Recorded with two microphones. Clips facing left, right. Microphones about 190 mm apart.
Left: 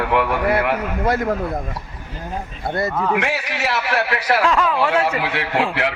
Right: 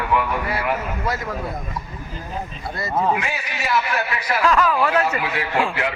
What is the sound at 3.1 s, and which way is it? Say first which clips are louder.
A man's voice: left 5 dB; 80° left.